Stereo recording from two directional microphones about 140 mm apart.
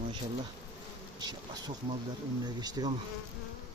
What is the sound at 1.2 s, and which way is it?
Speech, 30° right (ahead or behind).